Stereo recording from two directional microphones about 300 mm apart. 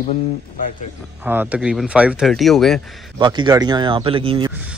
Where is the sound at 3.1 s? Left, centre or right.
Centre.